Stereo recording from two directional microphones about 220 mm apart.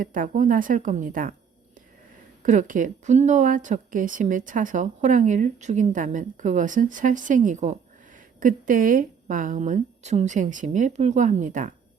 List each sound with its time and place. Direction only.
0.0 s a woman's voice: 35° right (ahead or behind)
2.4 s a woman's voice: 35° right (ahead or behind)